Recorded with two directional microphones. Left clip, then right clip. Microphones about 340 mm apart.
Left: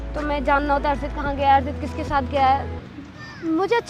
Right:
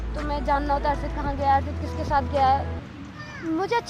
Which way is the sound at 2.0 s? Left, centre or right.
Left.